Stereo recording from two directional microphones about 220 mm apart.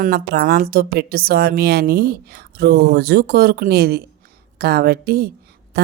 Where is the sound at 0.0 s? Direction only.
45° right (ahead or behind).